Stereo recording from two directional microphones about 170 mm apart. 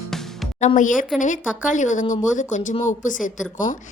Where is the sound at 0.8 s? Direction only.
50° left (ahead or behind).